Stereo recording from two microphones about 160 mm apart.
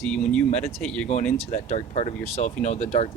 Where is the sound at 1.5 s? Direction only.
45° left (ahead or behind).